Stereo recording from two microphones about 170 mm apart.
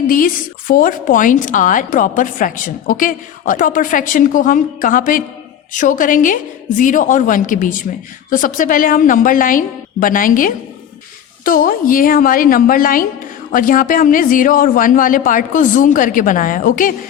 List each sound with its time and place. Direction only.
0.7 s a woman's voice: 55° left (ahead or behind)